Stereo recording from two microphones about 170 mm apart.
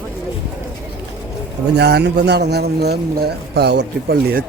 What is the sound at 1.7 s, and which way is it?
A man's voice, 75° right (ahead or behind).